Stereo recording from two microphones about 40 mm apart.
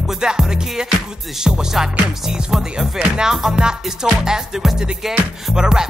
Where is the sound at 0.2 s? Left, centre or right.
Centre.